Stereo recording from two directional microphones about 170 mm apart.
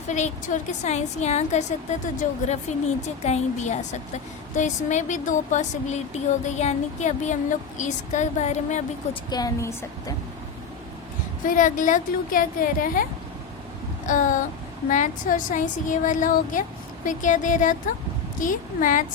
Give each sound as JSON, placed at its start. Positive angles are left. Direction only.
{"t": 0.1, "sound": "a woman's voice", "side_deg": 45}
{"t": 9.3, "sound": "a woman's voice", "side_deg": 20}
{"t": 11.4, "sound": "a woman's voice", "side_deg": 50}
{"t": 14.1, "sound": "a woman's voice", "side_deg": 50}